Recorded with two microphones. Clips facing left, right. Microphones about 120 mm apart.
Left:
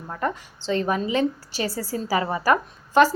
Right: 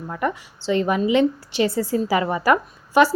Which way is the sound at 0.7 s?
15° right (ahead or behind).